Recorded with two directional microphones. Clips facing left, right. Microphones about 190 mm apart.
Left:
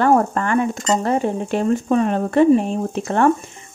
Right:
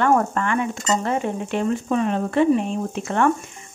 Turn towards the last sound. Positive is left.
turn(degrees=35)  # may be behind; listen again after turning